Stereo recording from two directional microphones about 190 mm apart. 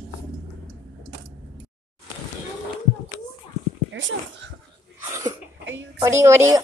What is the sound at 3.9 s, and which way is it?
Speech, 75° right (ahead or behind).